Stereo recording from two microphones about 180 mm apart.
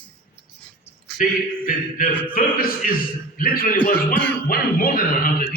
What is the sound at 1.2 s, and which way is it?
A man's voice, 50° left (ahead or behind).